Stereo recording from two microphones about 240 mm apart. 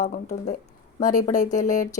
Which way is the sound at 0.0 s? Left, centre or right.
Left.